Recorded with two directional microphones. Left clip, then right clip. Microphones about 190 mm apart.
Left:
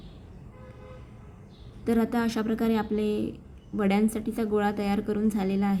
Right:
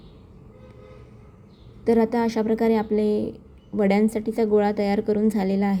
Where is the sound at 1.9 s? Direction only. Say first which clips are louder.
Right 7 dB; 15° right (ahead or behind).